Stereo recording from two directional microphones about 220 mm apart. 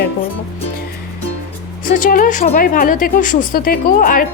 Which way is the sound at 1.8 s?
35° left (ahead or behind).